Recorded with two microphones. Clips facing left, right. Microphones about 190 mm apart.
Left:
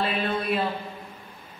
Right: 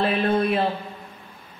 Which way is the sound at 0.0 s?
50° right (ahead or behind).